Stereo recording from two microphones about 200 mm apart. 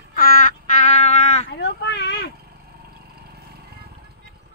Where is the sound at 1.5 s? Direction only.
60° left (ahead or behind).